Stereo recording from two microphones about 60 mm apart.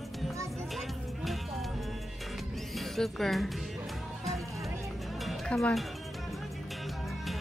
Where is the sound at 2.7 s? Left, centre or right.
Centre.